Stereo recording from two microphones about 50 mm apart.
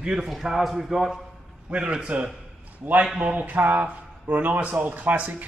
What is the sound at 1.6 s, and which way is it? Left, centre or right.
Speech, right.